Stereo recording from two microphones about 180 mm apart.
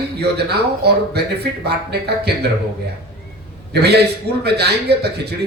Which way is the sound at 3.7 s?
65° right (ahead or behind).